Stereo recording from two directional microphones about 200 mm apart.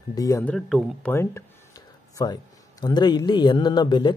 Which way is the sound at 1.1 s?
10° left (ahead or behind).